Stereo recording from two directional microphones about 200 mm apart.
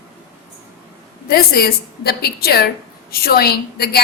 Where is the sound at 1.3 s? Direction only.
50° left (ahead or behind).